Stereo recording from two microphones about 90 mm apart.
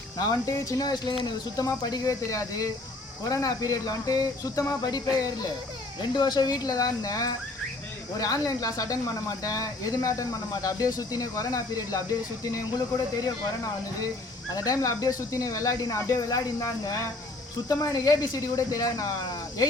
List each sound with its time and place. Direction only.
0.2 s speech: 45° left (ahead or behind)
6.0 s speech: 55° left (ahead or behind)
14.5 s speech: 40° left (ahead or behind)